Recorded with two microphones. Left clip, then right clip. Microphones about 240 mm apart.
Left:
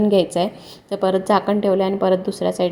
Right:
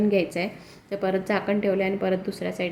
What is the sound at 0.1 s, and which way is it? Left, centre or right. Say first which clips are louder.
A woman's voice: left 7 dB; centre.